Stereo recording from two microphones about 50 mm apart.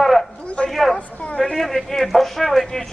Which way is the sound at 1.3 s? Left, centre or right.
Centre.